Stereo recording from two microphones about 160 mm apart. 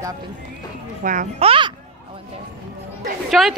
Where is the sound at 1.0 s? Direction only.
55° right (ahead or behind).